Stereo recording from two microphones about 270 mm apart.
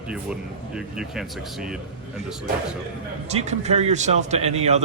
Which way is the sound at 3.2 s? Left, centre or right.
Right.